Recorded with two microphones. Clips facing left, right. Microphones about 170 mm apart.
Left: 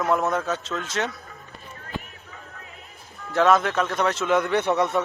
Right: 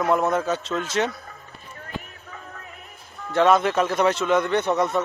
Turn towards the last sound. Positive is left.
turn(degrees=5)  # may be behind; listen again after turning